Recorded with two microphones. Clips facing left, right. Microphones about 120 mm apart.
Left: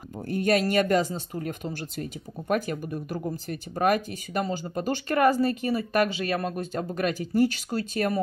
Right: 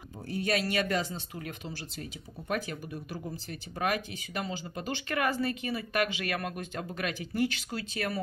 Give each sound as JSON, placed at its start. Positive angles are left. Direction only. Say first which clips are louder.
{"t": 0.3, "sound": "speech", "louder": "left 7 dB", "side_deg": 50}